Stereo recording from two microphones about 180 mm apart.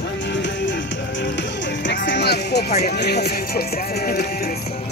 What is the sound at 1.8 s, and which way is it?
Speech, 85° left.